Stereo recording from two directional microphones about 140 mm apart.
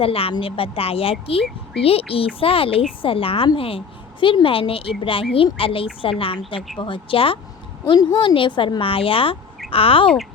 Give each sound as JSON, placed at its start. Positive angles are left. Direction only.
{"t": 0.0, "sound": "a woman's voice", "side_deg": 40}